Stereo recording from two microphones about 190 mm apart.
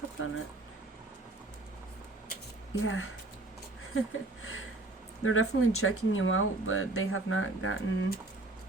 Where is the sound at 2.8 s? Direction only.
90° left.